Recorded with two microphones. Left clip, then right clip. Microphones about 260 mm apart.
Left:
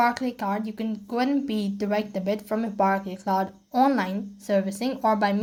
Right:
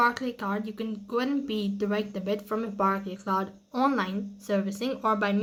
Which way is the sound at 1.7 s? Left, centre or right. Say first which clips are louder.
Left 5 dB; centre.